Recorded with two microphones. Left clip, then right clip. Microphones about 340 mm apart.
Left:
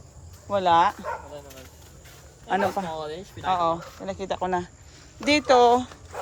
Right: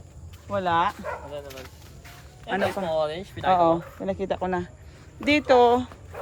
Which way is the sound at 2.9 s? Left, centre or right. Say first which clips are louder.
Right 7 dB; right.